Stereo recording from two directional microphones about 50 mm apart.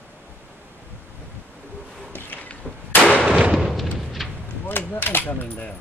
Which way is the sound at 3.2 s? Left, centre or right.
Right.